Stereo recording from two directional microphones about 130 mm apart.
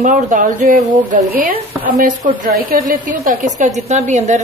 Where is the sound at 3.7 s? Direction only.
60° right (ahead or behind).